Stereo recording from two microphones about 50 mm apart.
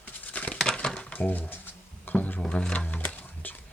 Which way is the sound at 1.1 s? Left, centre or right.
Left.